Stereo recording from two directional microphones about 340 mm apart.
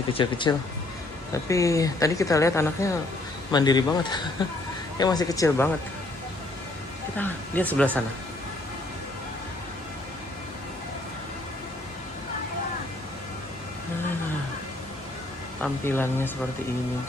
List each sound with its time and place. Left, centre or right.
0.1 s a woman's voice: centre
7.2 s speech: centre
15.6 s a woman's voice: centre